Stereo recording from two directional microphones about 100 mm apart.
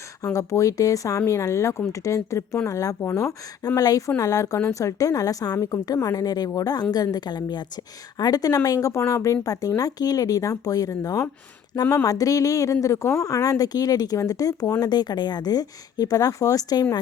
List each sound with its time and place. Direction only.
0.3 s a woman's voice: 35° left (ahead or behind)